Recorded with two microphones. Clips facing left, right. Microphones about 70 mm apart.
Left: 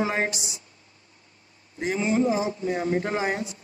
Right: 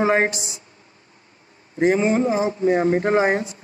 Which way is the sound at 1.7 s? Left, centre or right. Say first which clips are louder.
Right 6 dB; right.